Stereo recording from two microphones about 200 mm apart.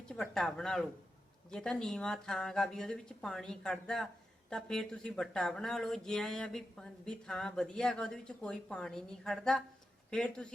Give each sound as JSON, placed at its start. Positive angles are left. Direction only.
{"t": 0.1, "sound": "speech", "side_deg": 0}